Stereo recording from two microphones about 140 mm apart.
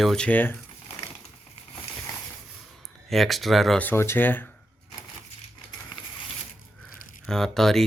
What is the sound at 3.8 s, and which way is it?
Speech, 15° left (ahead or behind).